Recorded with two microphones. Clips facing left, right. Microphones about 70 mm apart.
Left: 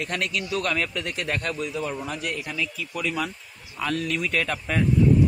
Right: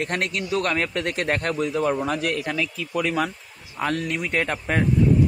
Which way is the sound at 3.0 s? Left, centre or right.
Right.